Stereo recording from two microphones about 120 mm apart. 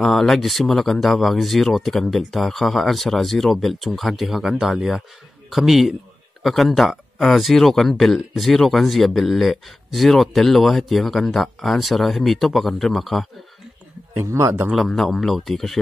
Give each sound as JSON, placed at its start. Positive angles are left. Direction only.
{"t": 0.0, "sound": "speech", "side_deg": 5}
{"t": 14.1, "sound": "a man's voice", "side_deg": -25}
{"t": 14.7, "sound": "speech", "side_deg": 0}